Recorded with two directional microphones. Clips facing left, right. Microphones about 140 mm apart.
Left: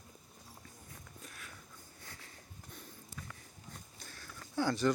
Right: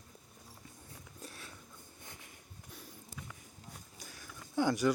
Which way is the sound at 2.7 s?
10° right (ahead or behind).